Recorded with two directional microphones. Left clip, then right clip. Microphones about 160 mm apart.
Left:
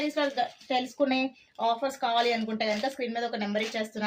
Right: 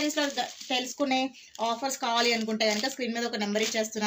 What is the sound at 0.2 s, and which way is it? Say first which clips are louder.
Speech: left 1 dB; 20° left (ahead or behind).